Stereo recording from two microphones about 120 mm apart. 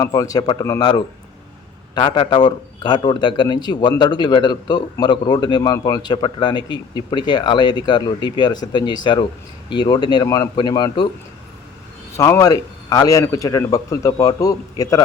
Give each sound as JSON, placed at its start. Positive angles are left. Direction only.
{"t": 0.0, "sound": "a man's voice", "side_deg": 30}
{"t": 2.0, "sound": "a man's voice", "side_deg": 40}
{"t": 12.1, "sound": "a man's voice", "side_deg": 25}